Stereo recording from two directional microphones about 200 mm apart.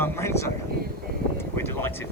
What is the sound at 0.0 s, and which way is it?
Speech, 15° left (ahead or behind).